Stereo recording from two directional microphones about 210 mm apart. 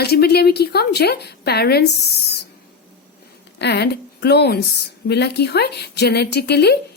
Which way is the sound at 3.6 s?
50° left (ahead or behind).